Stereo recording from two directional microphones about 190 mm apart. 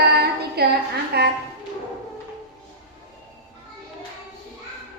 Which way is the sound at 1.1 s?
55° right (ahead or behind).